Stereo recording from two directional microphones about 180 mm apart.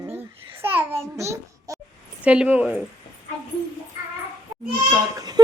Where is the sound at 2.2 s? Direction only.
5° right (ahead or behind).